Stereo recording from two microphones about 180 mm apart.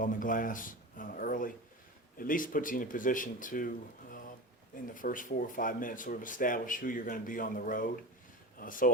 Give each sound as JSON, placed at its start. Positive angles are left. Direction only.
{"t": 0.0, "sound": "a sound", "side_deg": 50}
{"t": 2.1, "sound": "speech", "side_deg": 50}
{"t": 4.7, "sound": "speech", "side_deg": 50}